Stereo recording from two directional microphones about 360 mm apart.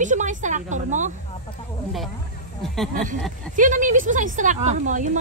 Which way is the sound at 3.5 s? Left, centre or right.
Right.